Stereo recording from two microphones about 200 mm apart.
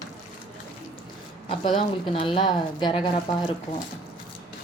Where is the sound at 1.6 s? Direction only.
25° left (ahead or behind).